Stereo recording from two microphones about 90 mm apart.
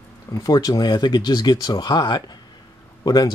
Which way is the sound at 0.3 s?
40° left (ahead or behind).